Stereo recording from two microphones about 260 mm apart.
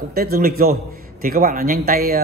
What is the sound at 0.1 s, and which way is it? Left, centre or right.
A man's voice, right.